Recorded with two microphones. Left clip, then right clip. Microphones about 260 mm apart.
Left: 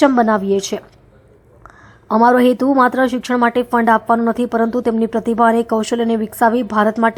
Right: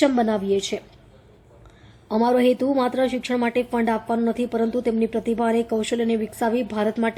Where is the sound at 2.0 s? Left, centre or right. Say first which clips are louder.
Left 7 dB; centre.